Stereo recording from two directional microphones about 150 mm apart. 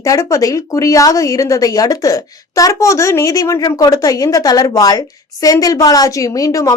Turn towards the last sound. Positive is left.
turn(degrees=20)  # may be behind; listen again after turning